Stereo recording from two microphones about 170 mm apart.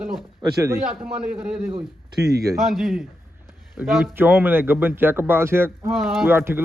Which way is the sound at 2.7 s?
Centre (ahead or behind).